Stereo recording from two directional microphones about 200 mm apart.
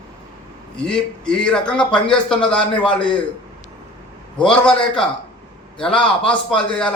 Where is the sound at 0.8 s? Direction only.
5° left (ahead or behind).